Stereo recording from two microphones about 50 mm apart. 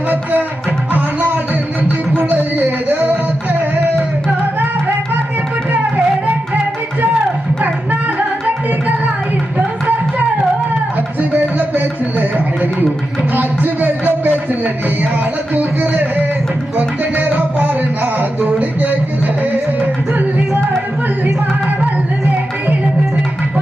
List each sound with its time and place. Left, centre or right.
0.1 s music: right
2.1 s a sound: right
3.5 s music: right
9.6 s music: right
13.3 s music: right